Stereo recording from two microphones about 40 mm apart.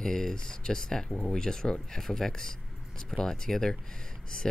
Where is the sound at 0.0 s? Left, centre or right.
Centre.